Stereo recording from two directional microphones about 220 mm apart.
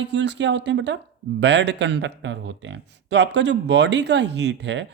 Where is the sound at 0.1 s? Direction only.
55° right (ahead or behind).